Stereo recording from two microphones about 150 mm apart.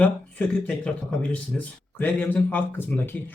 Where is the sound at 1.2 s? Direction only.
10° left (ahead or behind).